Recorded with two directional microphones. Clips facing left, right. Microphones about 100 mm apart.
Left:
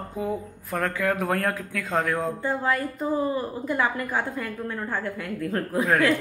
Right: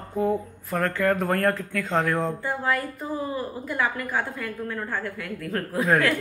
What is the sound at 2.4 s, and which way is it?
A woman's voice, 30° left (ahead or behind).